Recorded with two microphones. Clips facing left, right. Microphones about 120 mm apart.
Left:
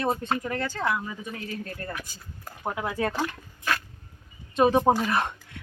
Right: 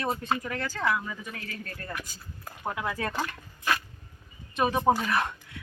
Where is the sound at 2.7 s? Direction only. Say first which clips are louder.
Left 4 dB; 20° left (ahead or behind).